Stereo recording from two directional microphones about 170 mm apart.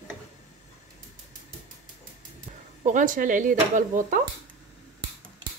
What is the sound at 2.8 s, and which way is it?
Speech, 50° right (ahead or behind).